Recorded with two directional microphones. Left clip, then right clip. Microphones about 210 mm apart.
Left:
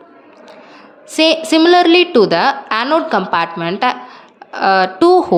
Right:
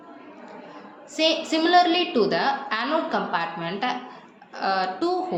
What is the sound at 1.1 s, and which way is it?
A woman's voice, 55° left (ahead or behind).